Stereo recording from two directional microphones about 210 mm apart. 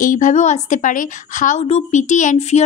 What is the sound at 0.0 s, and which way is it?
A woman's voice, 40° left (ahead or behind).